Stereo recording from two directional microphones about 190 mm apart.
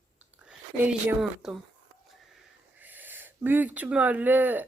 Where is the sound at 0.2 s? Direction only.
5° right (ahead or behind).